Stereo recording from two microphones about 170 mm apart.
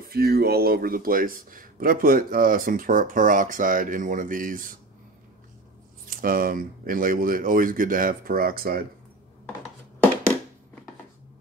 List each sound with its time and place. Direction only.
0.1 s speech: 65° right (ahead or behind)
6.0 s speech: 55° right (ahead or behind)